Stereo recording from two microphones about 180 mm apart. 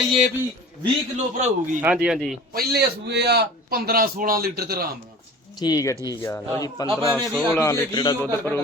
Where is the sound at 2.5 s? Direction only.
65° right (ahead or behind).